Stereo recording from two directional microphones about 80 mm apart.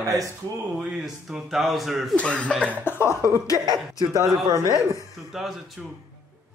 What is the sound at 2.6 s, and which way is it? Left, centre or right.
Cough, left.